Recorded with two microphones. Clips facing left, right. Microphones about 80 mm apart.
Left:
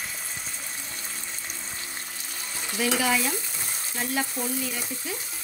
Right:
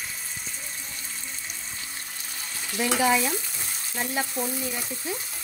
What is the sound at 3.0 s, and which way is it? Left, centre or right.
Stir, right.